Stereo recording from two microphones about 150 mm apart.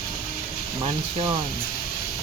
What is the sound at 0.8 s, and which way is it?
Speech, 35° right (ahead or behind).